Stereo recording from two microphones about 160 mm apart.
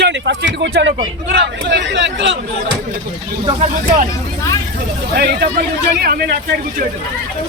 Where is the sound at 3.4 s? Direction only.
40° right (ahead or behind).